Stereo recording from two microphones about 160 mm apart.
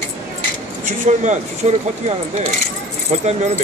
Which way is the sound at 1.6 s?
45° right (ahead or behind).